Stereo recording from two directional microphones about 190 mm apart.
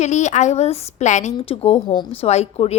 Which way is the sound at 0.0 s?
40° left (ahead or behind).